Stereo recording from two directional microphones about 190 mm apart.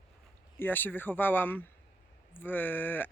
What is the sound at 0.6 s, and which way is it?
Speech, 10° left (ahead or behind).